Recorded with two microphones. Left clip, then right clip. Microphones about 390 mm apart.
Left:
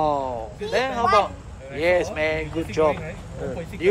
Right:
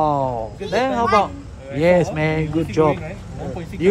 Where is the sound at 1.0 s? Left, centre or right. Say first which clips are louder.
Right 1 dB; centre.